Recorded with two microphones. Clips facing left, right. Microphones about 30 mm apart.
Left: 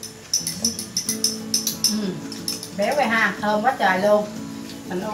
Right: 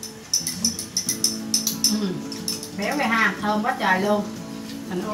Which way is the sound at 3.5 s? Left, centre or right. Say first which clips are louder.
Left 2 dB; centre.